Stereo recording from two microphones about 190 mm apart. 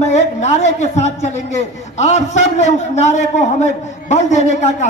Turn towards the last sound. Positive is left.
turn(degrees=40)  # may be behind; listen again after turning